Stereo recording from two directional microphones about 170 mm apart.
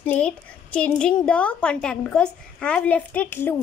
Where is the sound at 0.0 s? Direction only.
5° left (ahead or behind).